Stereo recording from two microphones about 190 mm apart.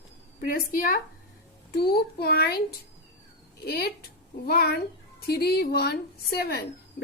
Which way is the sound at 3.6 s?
55° left (ahead or behind).